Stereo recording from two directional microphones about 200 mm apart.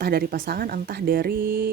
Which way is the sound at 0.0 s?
50° right (ahead or behind).